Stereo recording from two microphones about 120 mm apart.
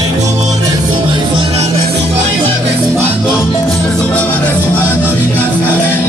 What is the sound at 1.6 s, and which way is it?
Music, 70° right (ahead or behind).